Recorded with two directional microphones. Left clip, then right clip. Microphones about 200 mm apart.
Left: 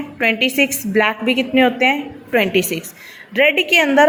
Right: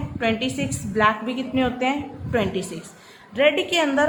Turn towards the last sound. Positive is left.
turn(degrees=25)  # may be behind; listen again after turning